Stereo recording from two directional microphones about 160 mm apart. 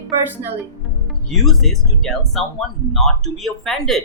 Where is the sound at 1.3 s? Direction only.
Centre (ahead or behind).